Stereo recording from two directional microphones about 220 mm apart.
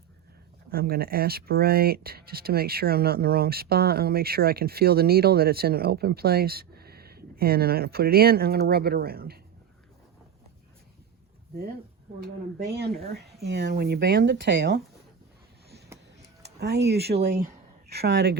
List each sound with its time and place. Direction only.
0.7 s speech: 45° right (ahead or behind)
12.2 s speech: 45° right (ahead or behind)
16.4 s speech: 50° right (ahead or behind)